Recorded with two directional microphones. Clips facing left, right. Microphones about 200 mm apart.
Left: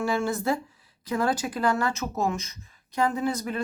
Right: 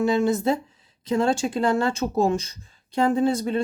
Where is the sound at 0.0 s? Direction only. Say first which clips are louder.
Right 6 dB; 20° right (ahead or behind).